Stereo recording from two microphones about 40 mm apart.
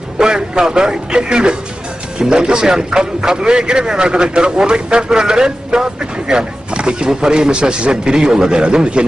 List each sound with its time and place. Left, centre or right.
0.2 s a man's voice: centre